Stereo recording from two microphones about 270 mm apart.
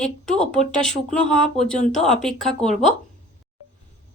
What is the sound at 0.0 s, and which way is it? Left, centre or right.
Speech, centre.